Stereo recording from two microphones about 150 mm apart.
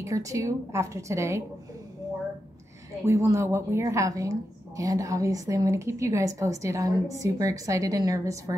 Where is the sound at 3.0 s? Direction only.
20° right (ahead or behind).